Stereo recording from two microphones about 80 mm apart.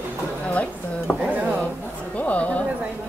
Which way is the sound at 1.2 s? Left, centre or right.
Centre.